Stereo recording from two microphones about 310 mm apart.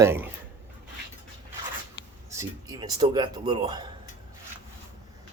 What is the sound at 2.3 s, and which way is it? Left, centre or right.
Speech, centre.